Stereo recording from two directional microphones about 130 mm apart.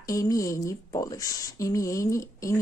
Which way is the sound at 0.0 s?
25° left (ahead or behind).